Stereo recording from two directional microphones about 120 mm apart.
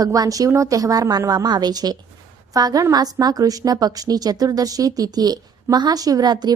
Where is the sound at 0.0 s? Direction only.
30° right (ahead or behind).